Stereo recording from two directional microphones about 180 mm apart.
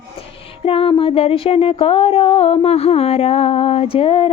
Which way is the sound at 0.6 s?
30° left (ahead or behind).